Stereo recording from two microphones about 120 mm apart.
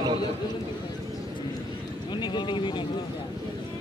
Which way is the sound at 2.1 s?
40° left (ahead or behind).